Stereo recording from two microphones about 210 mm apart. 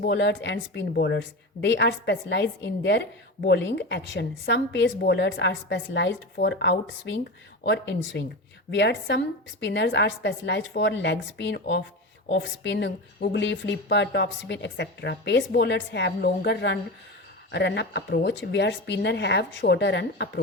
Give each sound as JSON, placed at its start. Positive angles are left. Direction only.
{"t": 0.0, "sound": "a woman's voice", "side_deg": 55}